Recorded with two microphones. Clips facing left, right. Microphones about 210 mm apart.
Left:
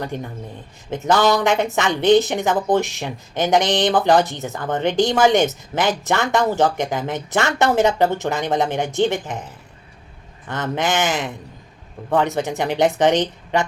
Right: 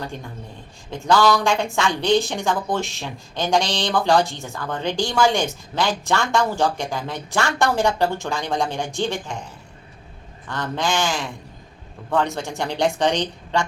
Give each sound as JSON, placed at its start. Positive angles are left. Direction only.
{"t": 0.9, "sound": "speech", "side_deg": 20}
{"t": 10.5, "sound": "speech", "side_deg": 20}